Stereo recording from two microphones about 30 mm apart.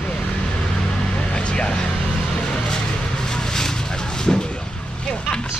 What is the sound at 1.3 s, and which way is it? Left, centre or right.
Vehicle, left.